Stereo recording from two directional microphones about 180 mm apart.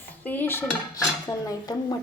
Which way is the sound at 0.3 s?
10° left (ahead or behind).